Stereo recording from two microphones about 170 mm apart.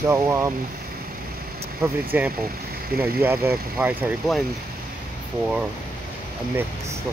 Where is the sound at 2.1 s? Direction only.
10° right (ahead or behind).